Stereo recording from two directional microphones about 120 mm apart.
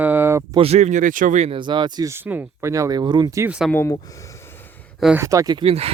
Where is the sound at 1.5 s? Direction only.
40° right (ahead or behind).